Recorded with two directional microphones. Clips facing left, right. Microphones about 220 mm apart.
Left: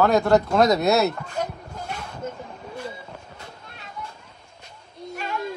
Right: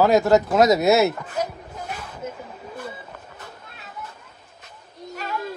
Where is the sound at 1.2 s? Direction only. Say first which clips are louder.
Right 1 dB; 5° right (ahead or behind).